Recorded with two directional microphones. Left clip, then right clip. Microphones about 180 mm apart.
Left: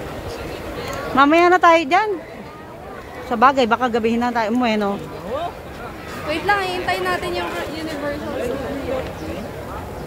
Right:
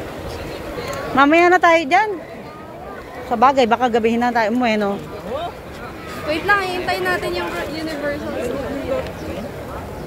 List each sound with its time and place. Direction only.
1.1 s a woman's voice: 5° left (ahead or behind)
3.3 s speech: 20° left (ahead or behind)
3.5 s speech: 5° left (ahead or behind)